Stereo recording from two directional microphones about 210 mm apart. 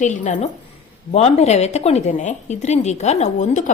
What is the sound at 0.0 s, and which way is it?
A woman's voice, 35° left (ahead or behind).